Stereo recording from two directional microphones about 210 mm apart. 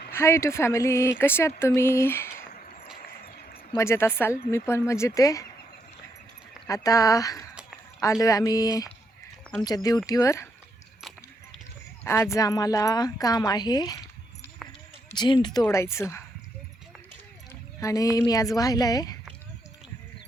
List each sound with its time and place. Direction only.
0.1 s speech: 10° left (ahead or behind)
2.5 s mechanisms: 40° left (ahead or behind)
3.2 s a sound: 45° left (ahead or behind)
3.7 s speech: 15° left (ahead or behind)
6.7 s speech: 15° left (ahead or behind)
12.0 s speech: 15° left (ahead or behind)
15.1 s speech: 20° left (ahead or behind)
17.5 s speech: 15° left (ahead or behind)